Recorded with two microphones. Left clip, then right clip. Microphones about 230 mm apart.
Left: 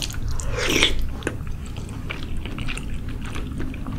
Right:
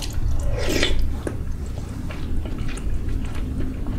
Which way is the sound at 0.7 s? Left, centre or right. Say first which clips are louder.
Left 3 dB; left.